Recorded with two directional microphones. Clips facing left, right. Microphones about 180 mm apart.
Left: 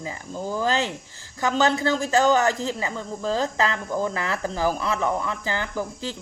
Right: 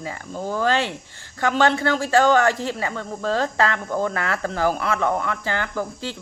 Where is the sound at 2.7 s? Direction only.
15° left (ahead or behind).